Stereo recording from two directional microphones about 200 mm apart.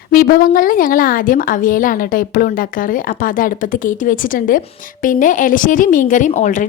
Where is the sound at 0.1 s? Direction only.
45° left (ahead or behind).